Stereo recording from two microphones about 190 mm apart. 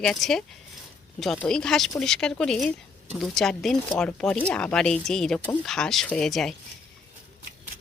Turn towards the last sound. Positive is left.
turn(degrees=0)  # may be behind; listen again after turning